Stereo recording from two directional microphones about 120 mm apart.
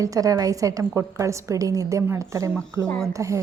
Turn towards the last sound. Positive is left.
turn(degrees=-25)  # may be behind; listen again after turning